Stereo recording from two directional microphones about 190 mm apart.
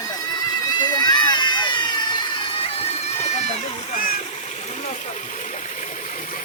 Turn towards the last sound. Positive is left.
turn(degrees=40)  # may be behind; listen again after turning